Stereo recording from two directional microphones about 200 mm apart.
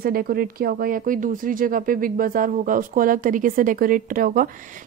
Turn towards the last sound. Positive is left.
turn(degrees=-45)  # may be behind; listen again after turning